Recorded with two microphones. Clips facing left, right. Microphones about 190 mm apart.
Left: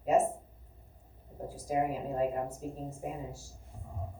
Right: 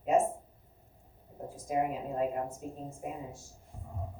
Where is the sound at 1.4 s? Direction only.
35° left (ahead or behind).